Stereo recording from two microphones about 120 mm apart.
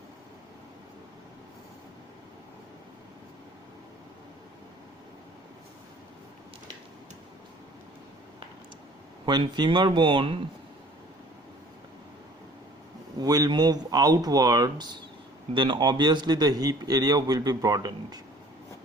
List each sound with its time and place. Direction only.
9.2 s speech: 40° right (ahead or behind)
13.1 s a man's voice: 30° right (ahead or behind)